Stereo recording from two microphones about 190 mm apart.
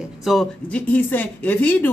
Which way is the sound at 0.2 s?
Centre (ahead or behind).